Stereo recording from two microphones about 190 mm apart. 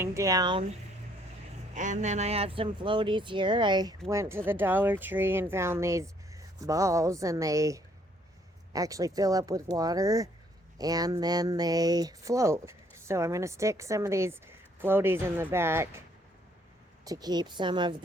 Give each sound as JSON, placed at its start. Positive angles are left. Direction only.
{"t": 0.0, "sound": "speech", "side_deg": -15}
{"t": 1.7, "sound": "speech", "side_deg": -40}